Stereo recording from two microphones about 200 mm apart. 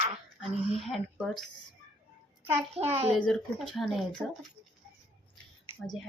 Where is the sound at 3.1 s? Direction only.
Centre (ahead or behind).